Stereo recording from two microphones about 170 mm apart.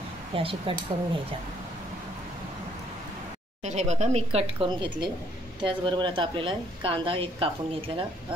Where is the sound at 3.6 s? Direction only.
45° right (ahead or behind).